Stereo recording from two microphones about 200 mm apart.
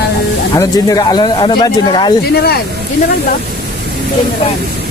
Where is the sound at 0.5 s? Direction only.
20° left (ahead or behind).